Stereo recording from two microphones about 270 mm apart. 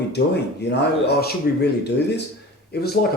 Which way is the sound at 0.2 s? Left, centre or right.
Left.